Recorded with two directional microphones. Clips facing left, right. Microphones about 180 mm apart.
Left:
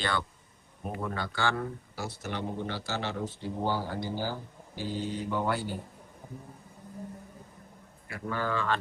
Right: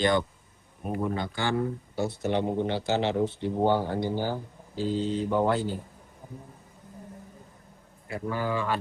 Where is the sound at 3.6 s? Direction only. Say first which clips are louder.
Right 7 dB; 60° right (ahead or behind).